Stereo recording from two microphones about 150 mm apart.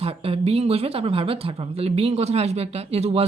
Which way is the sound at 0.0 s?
40° right (ahead or behind).